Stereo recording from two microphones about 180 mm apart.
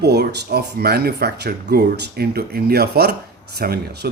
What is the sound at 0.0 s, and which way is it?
Speech, 65° right (ahead or behind).